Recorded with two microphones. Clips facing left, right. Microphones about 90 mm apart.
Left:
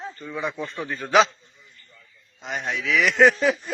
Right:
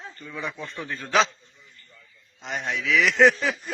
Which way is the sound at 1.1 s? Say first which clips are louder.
Left 4 dB; 15° left (ahead or behind).